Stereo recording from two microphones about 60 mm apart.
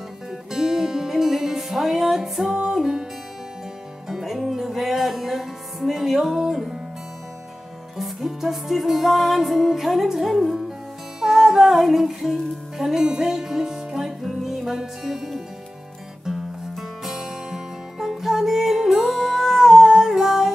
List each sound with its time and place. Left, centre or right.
0.5 s music: centre
4.1 s music: centre
8.0 s music: centre